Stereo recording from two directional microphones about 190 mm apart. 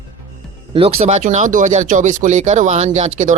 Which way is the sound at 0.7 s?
30° right (ahead or behind).